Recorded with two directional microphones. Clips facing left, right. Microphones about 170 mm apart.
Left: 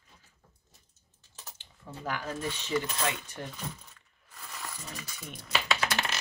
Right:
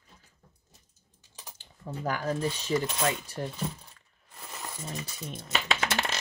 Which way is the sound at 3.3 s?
30° right (ahead or behind).